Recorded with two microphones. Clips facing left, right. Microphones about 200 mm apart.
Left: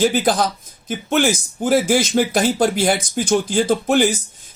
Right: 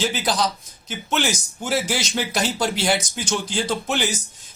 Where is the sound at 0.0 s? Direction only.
50° left (ahead or behind).